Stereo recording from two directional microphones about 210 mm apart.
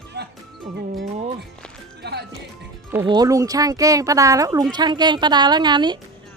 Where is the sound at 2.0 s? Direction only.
50° right (ahead or behind).